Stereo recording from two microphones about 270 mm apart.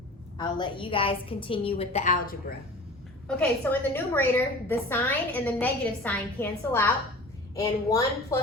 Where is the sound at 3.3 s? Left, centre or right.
Centre.